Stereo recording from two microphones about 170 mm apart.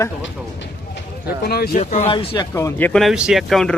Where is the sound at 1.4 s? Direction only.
70° left (ahead or behind).